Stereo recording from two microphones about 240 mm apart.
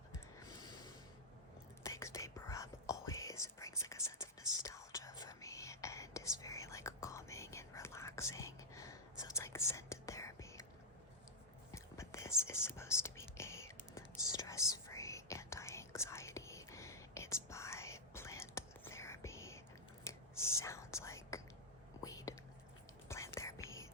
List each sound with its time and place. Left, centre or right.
0.1 s a sound: centre
1.8 s whispering: centre
11.7 s whispering: centre